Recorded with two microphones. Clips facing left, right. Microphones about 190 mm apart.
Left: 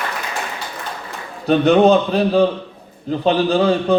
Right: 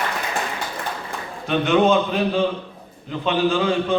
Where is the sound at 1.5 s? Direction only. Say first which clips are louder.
Left 5 dB; 35° left (ahead or behind).